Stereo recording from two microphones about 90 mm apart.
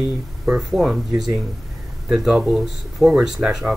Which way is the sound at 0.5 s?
5° right (ahead or behind).